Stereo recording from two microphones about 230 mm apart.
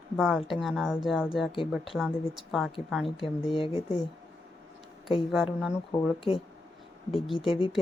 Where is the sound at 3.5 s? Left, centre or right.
Left.